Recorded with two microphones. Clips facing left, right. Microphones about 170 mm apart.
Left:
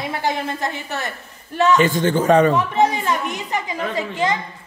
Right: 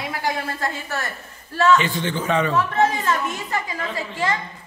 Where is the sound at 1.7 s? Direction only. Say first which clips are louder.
Left 6 dB; 45° left (ahead or behind).